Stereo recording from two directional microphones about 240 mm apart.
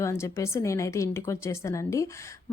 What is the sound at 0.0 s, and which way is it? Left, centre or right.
A woman's voice, centre.